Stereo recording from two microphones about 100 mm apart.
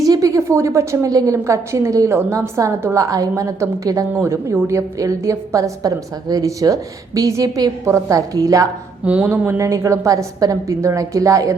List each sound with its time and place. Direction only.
0.0 s a woman's voice: 35° right (ahead or behind)
9.0 s a woman's voice: 15° right (ahead or behind); by 11.5 s 35° right (ahead or behind)